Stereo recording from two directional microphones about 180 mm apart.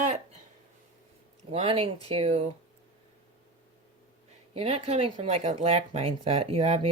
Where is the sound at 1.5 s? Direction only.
30° right (ahead or behind).